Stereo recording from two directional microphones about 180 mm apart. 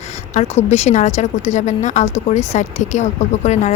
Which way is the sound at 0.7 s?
40° left (ahead or behind).